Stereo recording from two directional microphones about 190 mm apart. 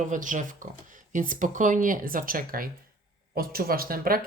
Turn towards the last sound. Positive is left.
turn(degrees=-50)  # may be behind; listen again after turning